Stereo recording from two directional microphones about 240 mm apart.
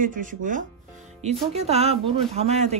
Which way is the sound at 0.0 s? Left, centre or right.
Right.